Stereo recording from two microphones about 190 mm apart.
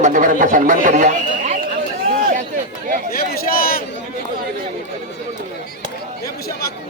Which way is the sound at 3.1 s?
50° left (ahead or behind).